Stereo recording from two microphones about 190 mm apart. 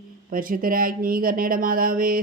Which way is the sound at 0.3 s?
45° right (ahead or behind).